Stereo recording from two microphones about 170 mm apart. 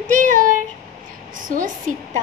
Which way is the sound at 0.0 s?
50° right (ahead or behind).